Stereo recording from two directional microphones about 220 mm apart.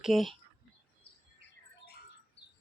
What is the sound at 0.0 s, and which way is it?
Speech, centre (ahead or behind).